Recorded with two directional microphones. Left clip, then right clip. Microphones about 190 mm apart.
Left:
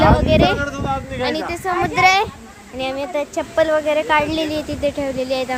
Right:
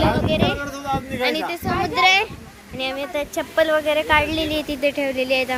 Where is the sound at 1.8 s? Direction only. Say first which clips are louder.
Left 2 dB; 10° left (ahead or behind).